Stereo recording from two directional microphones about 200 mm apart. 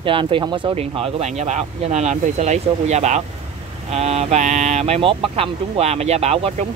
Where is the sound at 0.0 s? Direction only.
25° right (ahead or behind).